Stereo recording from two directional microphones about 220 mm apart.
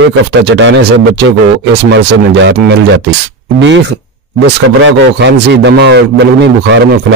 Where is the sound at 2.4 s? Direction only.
55° right (ahead or behind).